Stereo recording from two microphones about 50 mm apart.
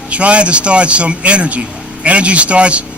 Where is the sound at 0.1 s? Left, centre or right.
Right.